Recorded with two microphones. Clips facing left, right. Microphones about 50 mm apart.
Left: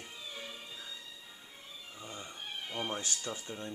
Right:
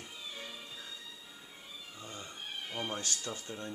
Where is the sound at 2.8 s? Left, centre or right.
Left.